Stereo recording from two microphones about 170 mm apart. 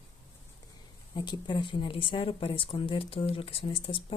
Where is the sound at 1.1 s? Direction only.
25° left (ahead or behind).